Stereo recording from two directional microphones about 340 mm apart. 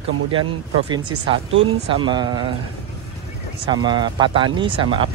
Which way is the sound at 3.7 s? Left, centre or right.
Centre.